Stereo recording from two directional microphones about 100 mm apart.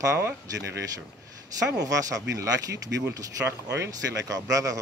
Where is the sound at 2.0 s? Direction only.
35° right (ahead or behind).